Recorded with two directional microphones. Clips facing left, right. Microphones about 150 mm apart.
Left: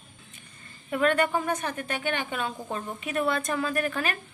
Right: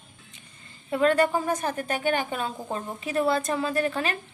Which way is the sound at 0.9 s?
30° right (ahead or behind).